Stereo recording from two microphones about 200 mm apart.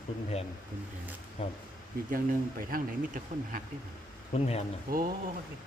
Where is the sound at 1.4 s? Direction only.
30° left (ahead or behind).